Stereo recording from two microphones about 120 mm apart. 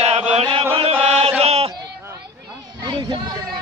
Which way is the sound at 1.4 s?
60° right (ahead or behind).